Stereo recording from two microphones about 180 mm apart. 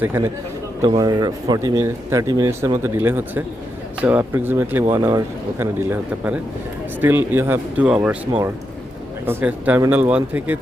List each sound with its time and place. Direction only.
0.0 s speech: 15° right (ahead or behind)
9.2 s speech: 10° right (ahead or behind)